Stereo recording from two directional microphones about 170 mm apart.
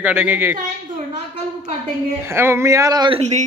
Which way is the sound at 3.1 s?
40° right (ahead or behind).